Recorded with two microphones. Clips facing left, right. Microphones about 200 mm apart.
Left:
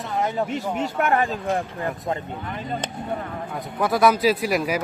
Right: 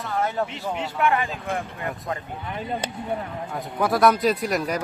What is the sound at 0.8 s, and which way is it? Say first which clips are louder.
Speech: left 1 dB; 45° left (ahead or behind).